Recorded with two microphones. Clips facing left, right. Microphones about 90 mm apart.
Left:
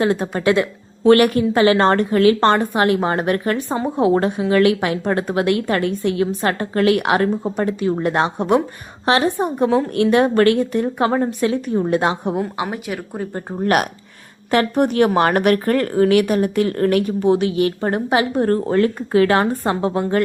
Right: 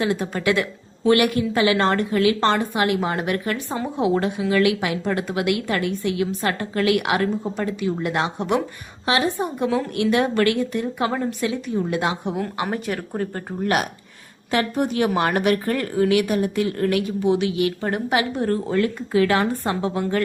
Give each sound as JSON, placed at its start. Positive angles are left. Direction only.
{"t": 0.0, "sound": "a woman's voice", "side_deg": 40}
{"t": 1.1, "sound": "a woman's voice", "side_deg": 45}
{"t": 12.3, "sound": "a woman's voice", "side_deg": 20}
{"t": 12.6, "sound": "speech", "side_deg": 5}
{"t": 14.5, "sound": "a woman's voice", "side_deg": 50}